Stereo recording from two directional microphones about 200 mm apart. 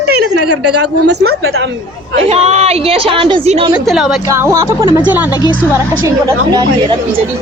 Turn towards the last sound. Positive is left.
turn(degrees=-15)  # may be behind; listen again after turning